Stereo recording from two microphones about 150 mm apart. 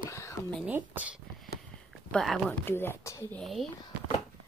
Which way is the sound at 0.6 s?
10° right (ahead or behind).